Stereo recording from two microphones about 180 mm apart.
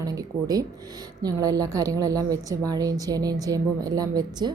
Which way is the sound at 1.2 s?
20° right (ahead or behind).